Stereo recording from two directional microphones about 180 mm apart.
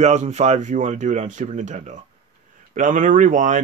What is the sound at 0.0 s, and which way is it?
Speech, 40° right (ahead or behind).